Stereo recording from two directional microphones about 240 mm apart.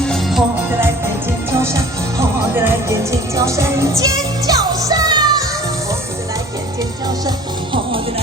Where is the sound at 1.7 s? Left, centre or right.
Centre.